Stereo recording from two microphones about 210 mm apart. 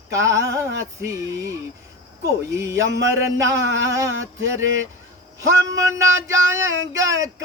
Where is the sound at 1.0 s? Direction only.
15° right (ahead or behind).